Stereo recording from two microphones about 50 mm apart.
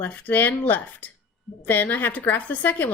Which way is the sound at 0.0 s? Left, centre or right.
Left.